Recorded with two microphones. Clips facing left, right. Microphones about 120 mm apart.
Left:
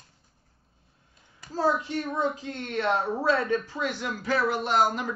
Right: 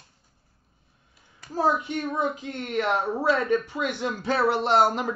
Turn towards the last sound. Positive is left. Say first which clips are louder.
# right 3 dB
turn(degrees=-30)  # may be behind; listen again after turning